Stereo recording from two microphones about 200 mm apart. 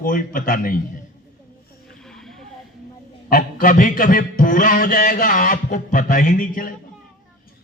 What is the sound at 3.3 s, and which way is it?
A man's voice, 45° left (ahead or behind).